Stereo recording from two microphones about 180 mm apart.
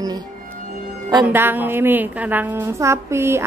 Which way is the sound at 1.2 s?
10° right (ahead or behind).